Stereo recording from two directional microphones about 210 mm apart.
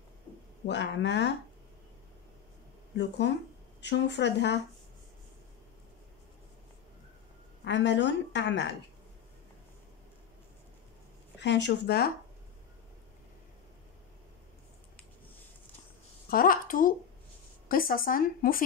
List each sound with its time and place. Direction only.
0.7 s a woman's voice: 55° left (ahead or behind)
3.8 s a woman's voice: 55° left (ahead or behind)
7.6 s a woman's voice: 55° left (ahead or behind)
11.3 s a woman's voice: 55° left (ahead or behind)
16.3 s a woman's voice: 45° left (ahead or behind)